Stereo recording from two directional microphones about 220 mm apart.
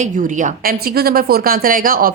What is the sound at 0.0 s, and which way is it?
A woman's voice, 35° right (ahead or behind).